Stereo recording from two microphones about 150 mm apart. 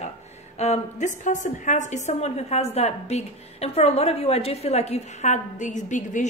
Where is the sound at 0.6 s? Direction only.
50° left (ahead or behind).